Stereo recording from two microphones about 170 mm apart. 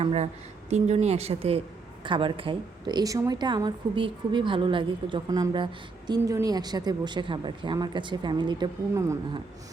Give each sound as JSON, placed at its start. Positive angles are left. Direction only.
{"t": 0.0, "sound": "a woman's voice", "side_deg": -35}